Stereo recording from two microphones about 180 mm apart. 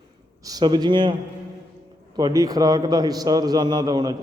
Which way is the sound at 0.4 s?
20° right (ahead or behind).